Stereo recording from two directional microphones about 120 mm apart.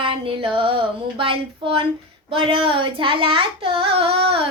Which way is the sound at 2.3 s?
45° right (ahead or behind).